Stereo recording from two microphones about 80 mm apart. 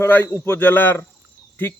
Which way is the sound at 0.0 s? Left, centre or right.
Left.